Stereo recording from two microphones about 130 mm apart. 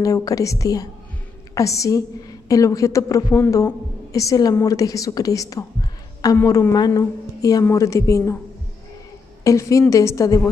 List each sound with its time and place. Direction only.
0.0 s a woman's voice: 25° left (ahead or behind)
9.4 s a woman's voice: 25° left (ahead or behind)